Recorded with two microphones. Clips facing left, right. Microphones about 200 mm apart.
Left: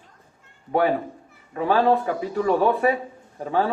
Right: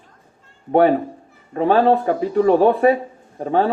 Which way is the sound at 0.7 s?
30° right (ahead or behind).